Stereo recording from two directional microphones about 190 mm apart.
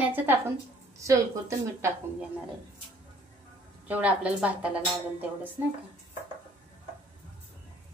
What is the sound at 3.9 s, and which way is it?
Speech, 5° right (ahead or behind).